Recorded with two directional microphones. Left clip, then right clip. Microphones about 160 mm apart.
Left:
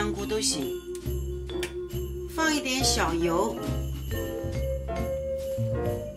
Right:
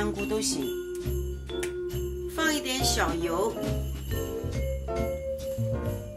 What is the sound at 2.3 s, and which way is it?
Music, 45° left (ahead or behind).